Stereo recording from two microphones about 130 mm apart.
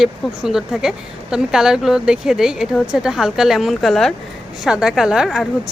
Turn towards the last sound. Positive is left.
turn(degrees=0)  # may be behind; listen again after turning